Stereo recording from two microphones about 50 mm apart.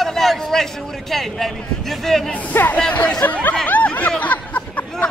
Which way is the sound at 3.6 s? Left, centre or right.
Left.